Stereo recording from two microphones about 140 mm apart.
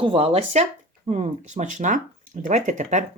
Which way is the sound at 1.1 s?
60° right (ahead or behind).